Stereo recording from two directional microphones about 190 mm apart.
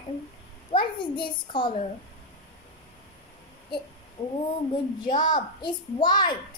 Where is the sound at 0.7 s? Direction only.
25° left (ahead or behind).